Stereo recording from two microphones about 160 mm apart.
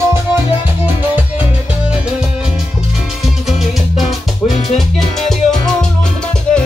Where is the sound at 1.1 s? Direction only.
10° right (ahead or behind).